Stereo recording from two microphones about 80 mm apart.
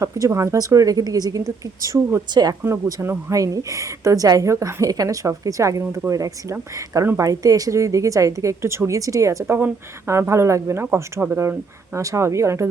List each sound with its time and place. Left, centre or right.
0.0 s a woman's voice: right
2.6 s a woman's voice: right
9.5 s a woman's voice: right